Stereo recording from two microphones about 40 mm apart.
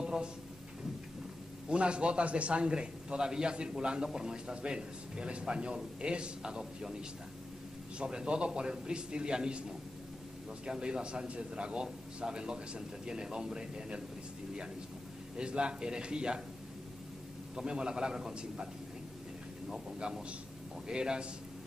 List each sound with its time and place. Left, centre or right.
0.0 s drawer open or close: right
1.7 s a man's voice: right
15.3 s a man's voice: right
17.6 s a man's voice: right
20.0 s a man's voice: centre